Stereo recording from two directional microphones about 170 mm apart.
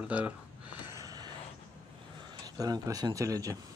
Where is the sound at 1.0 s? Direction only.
20° right (ahead or behind).